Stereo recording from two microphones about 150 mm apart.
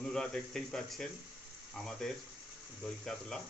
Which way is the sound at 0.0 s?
5° left (ahead or behind).